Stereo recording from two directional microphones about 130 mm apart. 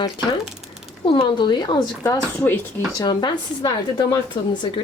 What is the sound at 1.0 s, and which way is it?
A woman's voice, 40° left (ahead or behind).